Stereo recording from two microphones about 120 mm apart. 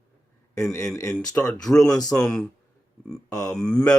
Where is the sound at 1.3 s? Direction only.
10° left (ahead or behind).